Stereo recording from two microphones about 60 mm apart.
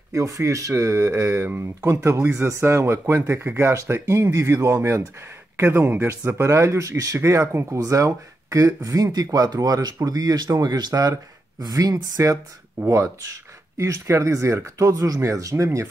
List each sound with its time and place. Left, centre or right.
0.1 s speech: right
11.7 s speech: right
12.8 s speech: right